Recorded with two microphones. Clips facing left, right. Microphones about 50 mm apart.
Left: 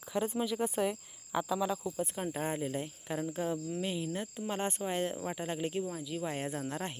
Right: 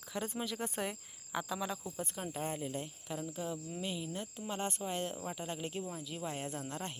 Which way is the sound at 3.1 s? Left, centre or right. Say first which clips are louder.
Left 6 dB; left.